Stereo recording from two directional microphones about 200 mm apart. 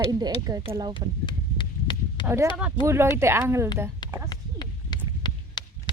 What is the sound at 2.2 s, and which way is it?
Speech, 15° right (ahead or behind).